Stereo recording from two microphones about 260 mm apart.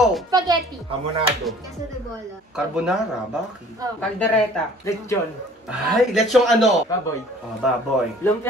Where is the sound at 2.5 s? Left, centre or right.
Centre.